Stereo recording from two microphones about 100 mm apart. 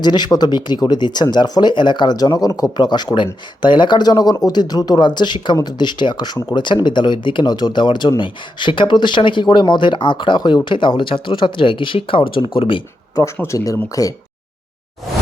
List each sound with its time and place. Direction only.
0.0 s speech: 45° left (ahead or behind); by 12.8 s 60° left (ahead or behind)
13.3 s speech: 20° left (ahead or behind)
13.9 s speech: 35° left (ahead or behind)